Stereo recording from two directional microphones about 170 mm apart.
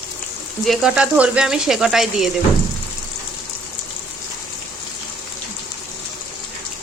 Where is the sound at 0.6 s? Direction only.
Centre (ahead or behind).